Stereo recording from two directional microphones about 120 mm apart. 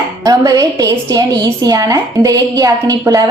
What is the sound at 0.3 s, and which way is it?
A woman's voice, 30° right (ahead or behind).